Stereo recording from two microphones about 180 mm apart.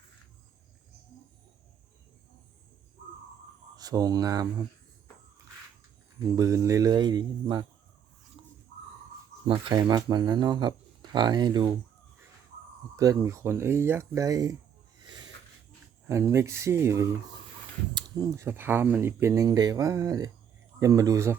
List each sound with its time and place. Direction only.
3.8 s speech: 20° right (ahead or behind)
6.3 s speech: 20° right (ahead or behind)
9.5 s speech: 25° right (ahead or behind)
13.0 s speech: 15° right (ahead or behind)
14.9 s a sound: 25° right (ahead or behind)
16.0 s speech: 15° right (ahead or behind)